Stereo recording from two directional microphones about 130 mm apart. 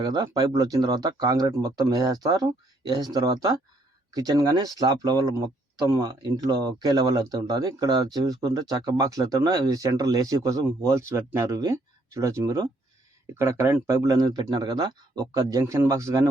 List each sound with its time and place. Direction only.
0.0 s speech: 30° right (ahead or behind)
13.9 s speech: 30° right (ahead or behind)